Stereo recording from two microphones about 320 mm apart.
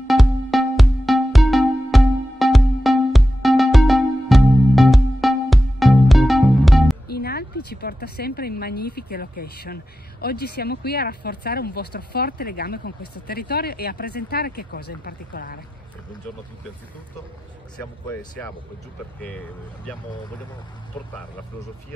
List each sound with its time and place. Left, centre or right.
0.0 s music: centre
7.1 s speech: left